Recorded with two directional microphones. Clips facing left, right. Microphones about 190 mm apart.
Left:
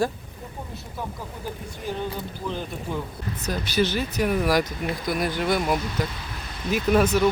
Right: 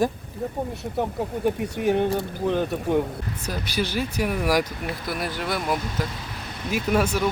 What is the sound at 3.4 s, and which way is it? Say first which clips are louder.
Speech: left 4 dB; 10° right (ahead or behind).